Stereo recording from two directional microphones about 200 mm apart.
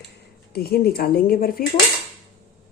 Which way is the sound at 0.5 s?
50° left (ahead or behind).